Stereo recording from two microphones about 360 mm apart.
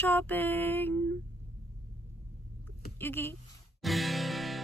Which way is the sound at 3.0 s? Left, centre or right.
Centre.